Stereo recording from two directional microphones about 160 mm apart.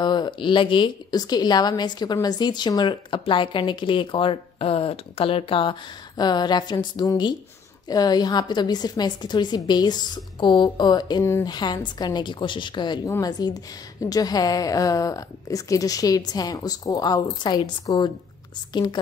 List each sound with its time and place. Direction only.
0.0 s a woman's voice: 30° left (ahead or behind)